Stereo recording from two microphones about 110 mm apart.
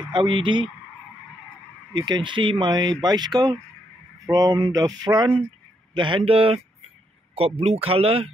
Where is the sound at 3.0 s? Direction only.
40° right (ahead or behind).